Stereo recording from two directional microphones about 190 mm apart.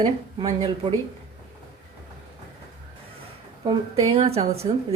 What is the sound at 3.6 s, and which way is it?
A woman's voice, 30° right (ahead or behind).